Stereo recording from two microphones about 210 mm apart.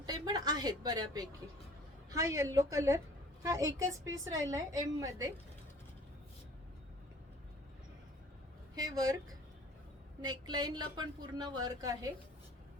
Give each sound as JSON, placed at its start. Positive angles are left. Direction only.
{"t": 0.0, "sound": "a sound", "side_deg": -20}
{"t": 2.0, "sound": "a woman's voice", "side_deg": -15}
{"t": 8.7, "sound": "a woman's voice", "side_deg": -15}